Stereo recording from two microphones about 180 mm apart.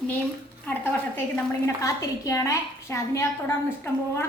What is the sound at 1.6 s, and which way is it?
A woman's voice, 15° left (ahead or behind).